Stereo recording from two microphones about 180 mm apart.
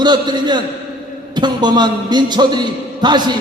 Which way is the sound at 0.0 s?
25° right (ahead or behind).